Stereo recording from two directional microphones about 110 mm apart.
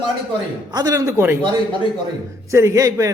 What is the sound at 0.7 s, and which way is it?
Speech, 35° right (ahead or behind).